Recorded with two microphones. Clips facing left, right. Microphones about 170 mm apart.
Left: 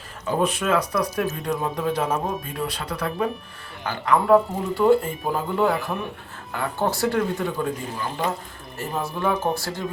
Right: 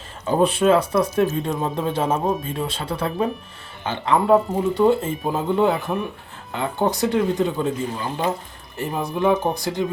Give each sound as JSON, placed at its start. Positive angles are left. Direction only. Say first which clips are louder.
{"t": 0.3, "sound": "speech", "louder": "right 5 dB", "side_deg": -30}